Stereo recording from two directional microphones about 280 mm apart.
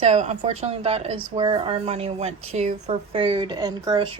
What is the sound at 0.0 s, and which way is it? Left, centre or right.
A woman's voice, right.